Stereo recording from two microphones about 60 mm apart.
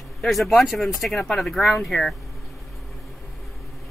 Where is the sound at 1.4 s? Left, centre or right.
Centre.